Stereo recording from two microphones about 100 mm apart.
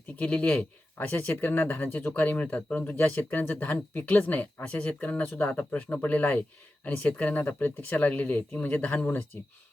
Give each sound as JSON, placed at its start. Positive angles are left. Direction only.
{"t": 0.2, "sound": "speech", "side_deg": 15}